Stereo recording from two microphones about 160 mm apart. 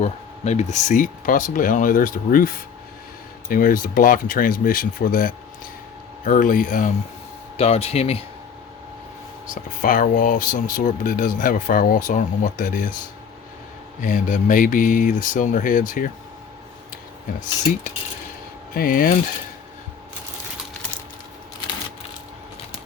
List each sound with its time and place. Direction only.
0.0 s speech: 45° left (ahead or behind); by 2.5 s 60° left (ahead or behind)
3.5 s speech: 60° left (ahead or behind)
7.5 s speech: 40° left (ahead or behind)
9.8 s speech: 60° left (ahead or behind)
14.0 s speech: 55° left (ahead or behind)
18.7 s speech: 65° left (ahead or behind)